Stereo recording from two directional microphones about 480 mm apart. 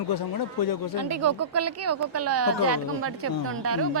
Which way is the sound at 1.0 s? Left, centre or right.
Right.